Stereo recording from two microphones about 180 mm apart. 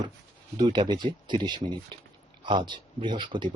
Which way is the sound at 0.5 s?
25° right (ahead or behind).